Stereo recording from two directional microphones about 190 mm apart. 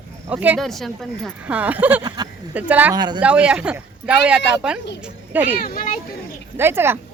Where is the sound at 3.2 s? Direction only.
5° right (ahead or behind).